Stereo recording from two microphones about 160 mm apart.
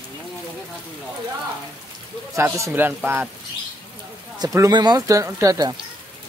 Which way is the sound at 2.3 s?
20° right (ahead or behind).